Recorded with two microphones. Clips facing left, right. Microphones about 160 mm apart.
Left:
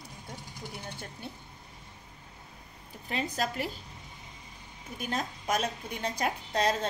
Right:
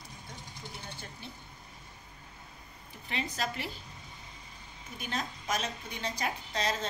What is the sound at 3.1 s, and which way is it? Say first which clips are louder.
Speech: left 3 dB; 40° left (ahead or behind).